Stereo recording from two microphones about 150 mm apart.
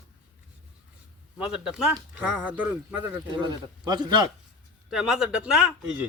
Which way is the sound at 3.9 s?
30° right (ahead or behind).